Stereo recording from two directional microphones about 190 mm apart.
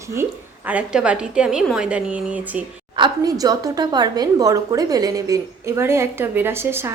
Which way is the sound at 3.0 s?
20° right (ahead or behind).